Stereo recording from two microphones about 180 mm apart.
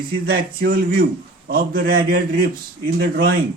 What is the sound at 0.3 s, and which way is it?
Speech, 60° right (ahead or behind).